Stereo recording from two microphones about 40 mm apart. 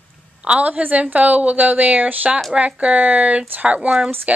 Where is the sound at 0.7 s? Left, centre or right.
Right.